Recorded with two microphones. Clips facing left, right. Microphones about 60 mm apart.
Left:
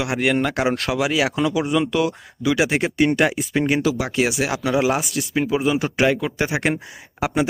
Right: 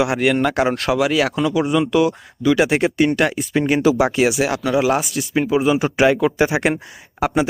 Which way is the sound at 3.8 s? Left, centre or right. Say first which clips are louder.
Right 5 dB; right.